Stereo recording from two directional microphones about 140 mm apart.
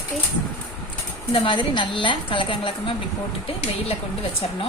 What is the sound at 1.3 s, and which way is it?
Speech, 35° left (ahead or behind).